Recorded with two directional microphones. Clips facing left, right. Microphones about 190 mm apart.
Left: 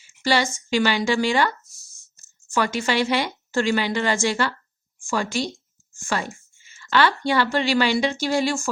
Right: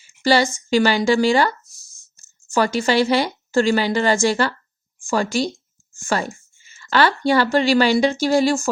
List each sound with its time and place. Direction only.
0.2 s speech: 35° right (ahead or behind)